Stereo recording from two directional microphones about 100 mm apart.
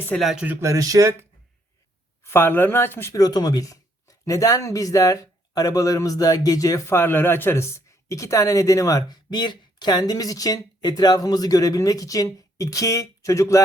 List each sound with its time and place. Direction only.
0.2 s speech: centre (ahead or behind)
0.6 s speech: 35° right (ahead or behind)
2.2 s speech: 25° left (ahead or behind)
3.1 s speech: 40° left (ahead or behind)